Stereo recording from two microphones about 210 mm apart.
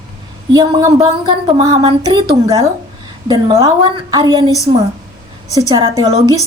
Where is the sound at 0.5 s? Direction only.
20° right (ahead or behind).